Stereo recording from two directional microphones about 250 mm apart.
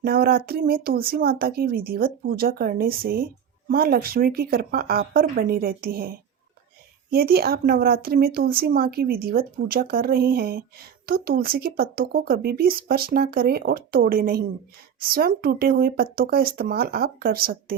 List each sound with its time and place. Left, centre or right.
0.0 s a woman's voice: right